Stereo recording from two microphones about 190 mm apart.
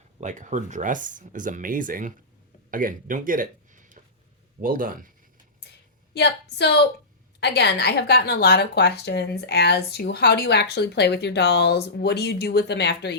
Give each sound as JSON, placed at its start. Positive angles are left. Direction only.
{"t": 0.2, "sound": "speech", "side_deg": -40}
{"t": 6.1, "sound": "a woman's voice", "side_deg": 60}